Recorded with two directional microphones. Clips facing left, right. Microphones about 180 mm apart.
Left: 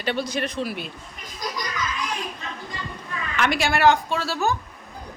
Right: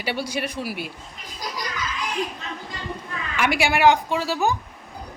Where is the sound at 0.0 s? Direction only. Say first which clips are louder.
Left 1 dB; 10° right (ahead or behind).